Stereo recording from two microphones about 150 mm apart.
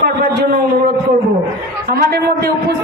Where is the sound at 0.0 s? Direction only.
90° right.